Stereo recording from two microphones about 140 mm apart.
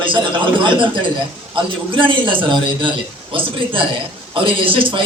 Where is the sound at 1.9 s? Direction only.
35° right (ahead or behind).